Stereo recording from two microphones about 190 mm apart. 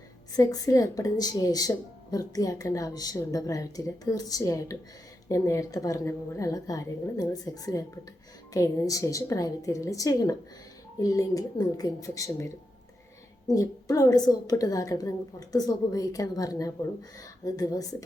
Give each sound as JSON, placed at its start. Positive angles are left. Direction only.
{"t": 0.3, "sound": "a woman's voice", "side_deg": 20}